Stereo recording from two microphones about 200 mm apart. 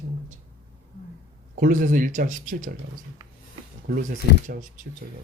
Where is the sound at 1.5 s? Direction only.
40° right (ahead or behind).